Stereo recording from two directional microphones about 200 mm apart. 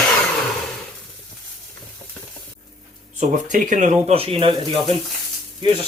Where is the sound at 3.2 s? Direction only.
35° right (ahead or behind).